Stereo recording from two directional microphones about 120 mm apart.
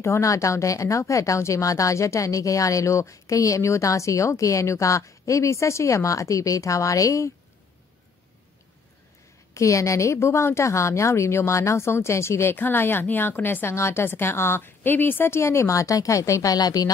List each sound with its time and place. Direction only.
0.0 s a woman's voice: 25° left (ahead or behind)
9.5 s a woman's voice: 25° left (ahead or behind)